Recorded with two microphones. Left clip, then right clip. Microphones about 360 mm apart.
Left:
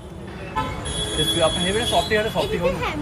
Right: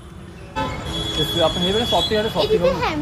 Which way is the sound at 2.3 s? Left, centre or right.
Right.